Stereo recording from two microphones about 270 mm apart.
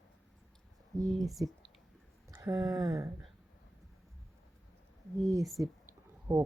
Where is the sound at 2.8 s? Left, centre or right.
Centre.